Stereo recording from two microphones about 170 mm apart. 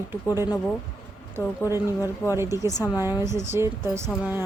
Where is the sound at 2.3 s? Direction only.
15° right (ahead or behind).